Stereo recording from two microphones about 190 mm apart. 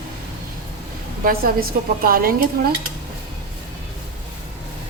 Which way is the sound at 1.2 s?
50° right (ahead or behind).